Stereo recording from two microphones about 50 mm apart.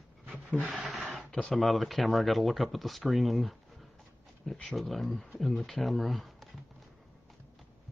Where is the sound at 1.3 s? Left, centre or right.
Left.